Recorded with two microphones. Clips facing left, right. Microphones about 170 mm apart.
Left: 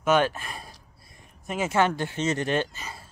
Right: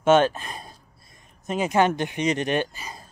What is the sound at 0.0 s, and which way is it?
Speech, 25° right (ahead or behind).